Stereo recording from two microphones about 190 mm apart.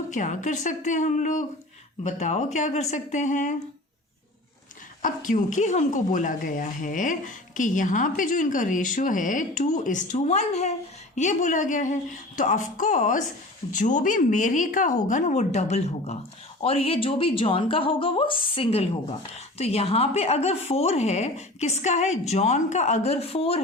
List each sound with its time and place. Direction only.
0.1 s a woman's voice: 40° left (ahead or behind)
5.0 s a woman's voice: 45° left (ahead or behind)